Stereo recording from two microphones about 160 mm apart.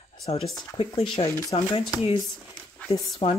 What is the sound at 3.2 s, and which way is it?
Speech, 40° left (ahead or behind).